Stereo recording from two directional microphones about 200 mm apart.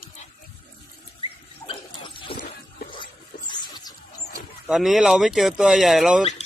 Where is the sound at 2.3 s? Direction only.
50° left (ahead or behind).